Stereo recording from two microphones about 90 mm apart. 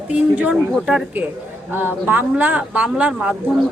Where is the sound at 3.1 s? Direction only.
5° right (ahead or behind).